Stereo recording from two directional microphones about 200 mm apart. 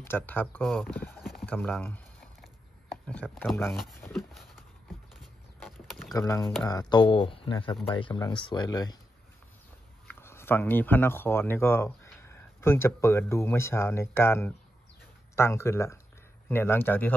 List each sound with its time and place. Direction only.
0.0 s speech: 10° left (ahead or behind)
1.5 s a sound: 5° left (ahead or behind)
3.1 s speech: 5° left (ahead or behind)
4.1 s a sound: centre (ahead or behind)
5.9 s typing: centre (ahead or behind)
6.1 s speech: 15° left (ahead or behind)
10.0 s speech: 10° left (ahead or behind)